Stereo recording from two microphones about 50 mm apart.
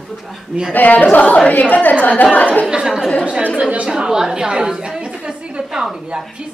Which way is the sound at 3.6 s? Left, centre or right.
Right.